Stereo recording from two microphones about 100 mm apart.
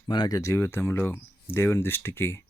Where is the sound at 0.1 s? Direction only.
45° left (ahead or behind); by 2.4 s 25° left (ahead or behind).